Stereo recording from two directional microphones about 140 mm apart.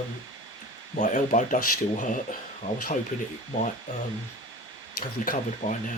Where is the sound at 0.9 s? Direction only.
60° left (ahead or behind).